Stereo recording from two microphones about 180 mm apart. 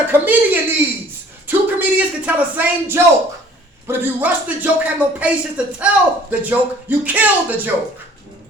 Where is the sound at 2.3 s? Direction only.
10° right (ahead or behind).